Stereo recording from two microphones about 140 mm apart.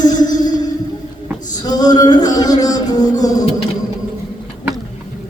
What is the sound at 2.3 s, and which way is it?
Music, 25° left (ahead or behind).